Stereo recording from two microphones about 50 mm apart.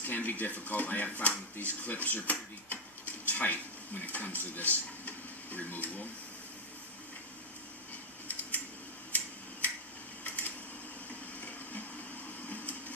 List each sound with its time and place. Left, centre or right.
0.0 s speech: left
8.3 s scissors: left
10.2 s a sound: left